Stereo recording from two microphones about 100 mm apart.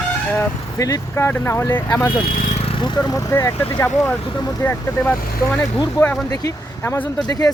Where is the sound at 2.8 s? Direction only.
45° left (ahead or behind).